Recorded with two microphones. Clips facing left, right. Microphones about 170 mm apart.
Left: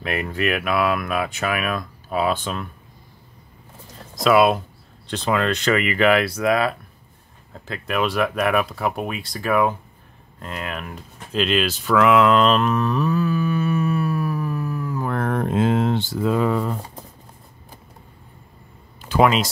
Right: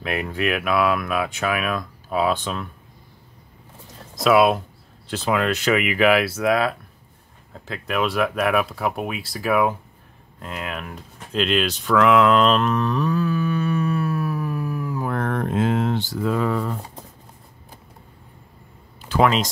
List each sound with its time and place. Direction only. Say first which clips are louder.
0.0 s speech: even; centre (ahead or behind)
4.1 s speech: even; centre (ahead or behind)
10.4 s a sound: even; 5° right (ahead or behind)
15.1 s a sound: left 2 dB; 10° left (ahead or behind)
15.4 s speech: left 2 dB; 25° left (ahead or behind)
19.0 s speech: left 1 dB; 15° left (ahead or behind)